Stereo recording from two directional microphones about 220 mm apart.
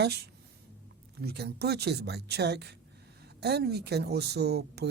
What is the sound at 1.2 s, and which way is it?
Speech, 45° right (ahead or behind).